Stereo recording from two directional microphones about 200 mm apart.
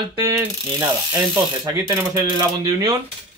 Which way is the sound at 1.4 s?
20° right (ahead or behind).